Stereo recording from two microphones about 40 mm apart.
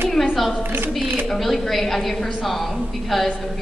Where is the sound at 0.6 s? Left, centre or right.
Right.